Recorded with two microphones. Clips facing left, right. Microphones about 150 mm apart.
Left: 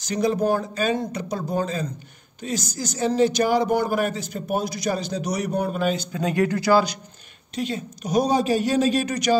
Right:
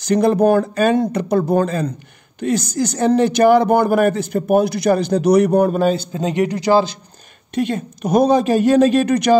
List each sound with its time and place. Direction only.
0.0 s a man's voice: 60° right (ahead or behind); by 6.0 s 40° right (ahead or behind)
6.1 s speech: 20° right (ahead or behind)
7.5 s a man's voice: 55° right (ahead or behind)